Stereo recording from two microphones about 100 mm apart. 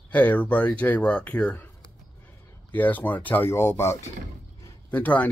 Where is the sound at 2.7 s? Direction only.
15° left (ahead or behind).